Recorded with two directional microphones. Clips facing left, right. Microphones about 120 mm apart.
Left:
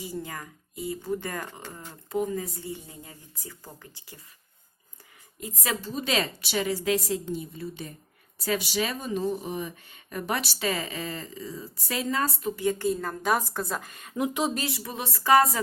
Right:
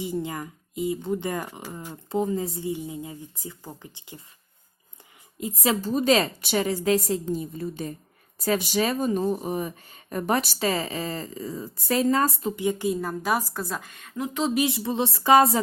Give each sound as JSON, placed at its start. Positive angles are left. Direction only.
{"t": 0.0, "sound": "speech", "side_deg": -20}
{"t": 2.0, "sound": "speech", "side_deg": -30}
{"t": 2.6, "sound": "speech", "side_deg": -15}
{"t": 5.4, "sound": "speech", "side_deg": -25}
{"t": 5.8, "sound": "speech", "side_deg": -45}
{"t": 12.5, "sound": "a woman's voice", "side_deg": -15}
{"t": 14.1, "sound": "speech", "side_deg": 15}
{"t": 14.5, "sound": "speech", "side_deg": -20}